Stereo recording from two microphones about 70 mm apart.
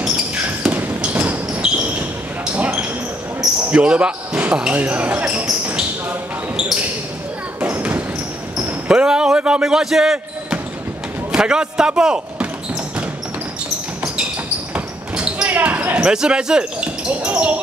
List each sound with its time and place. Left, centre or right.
0.7 s basketball bounce: right
3.7 s speech: centre
7.7 s basketball bounce: right
8.5 s speech: centre
11.3 s a man's voice: centre
14.7 s basketball bounce: centre
17.1 s speech: right